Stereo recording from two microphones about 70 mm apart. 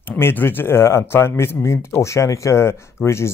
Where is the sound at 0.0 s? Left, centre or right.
Left.